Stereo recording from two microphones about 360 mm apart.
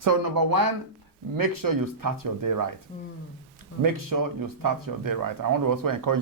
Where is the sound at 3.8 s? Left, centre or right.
Right.